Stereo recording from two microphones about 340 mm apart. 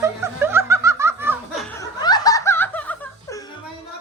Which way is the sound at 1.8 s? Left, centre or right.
Centre.